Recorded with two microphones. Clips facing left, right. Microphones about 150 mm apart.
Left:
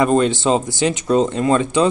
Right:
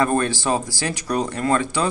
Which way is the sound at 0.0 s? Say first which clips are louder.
Left 5 dB; 20° left (ahead or behind).